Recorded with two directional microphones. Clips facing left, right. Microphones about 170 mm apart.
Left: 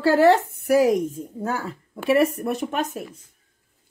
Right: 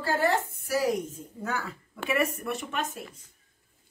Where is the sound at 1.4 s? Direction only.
30° left (ahead or behind).